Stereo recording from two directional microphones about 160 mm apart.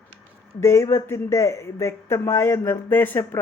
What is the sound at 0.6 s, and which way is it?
Speech, 15° left (ahead or behind).